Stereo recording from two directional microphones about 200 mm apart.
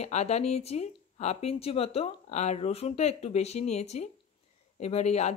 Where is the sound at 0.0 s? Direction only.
35° left (ahead or behind).